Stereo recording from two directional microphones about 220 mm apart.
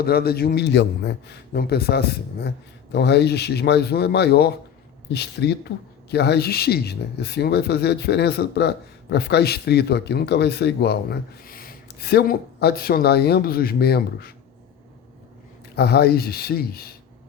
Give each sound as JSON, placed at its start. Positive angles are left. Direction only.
{"t": 0.0, "sound": "speech", "side_deg": 45}
{"t": 15.7, "sound": "speech", "side_deg": 45}